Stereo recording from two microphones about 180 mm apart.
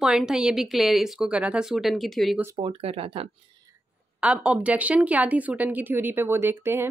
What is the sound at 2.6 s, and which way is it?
Speech, 30° right (ahead or behind).